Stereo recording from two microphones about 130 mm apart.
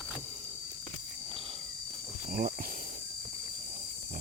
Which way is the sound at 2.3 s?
90° right.